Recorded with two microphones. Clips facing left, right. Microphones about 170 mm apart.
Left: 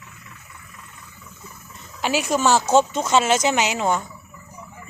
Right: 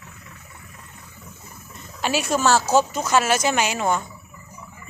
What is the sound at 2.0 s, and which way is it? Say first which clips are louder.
Speech: left 1 dB; 15° left (ahead or behind).